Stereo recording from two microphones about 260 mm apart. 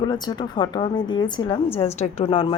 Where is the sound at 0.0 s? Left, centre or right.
Centre.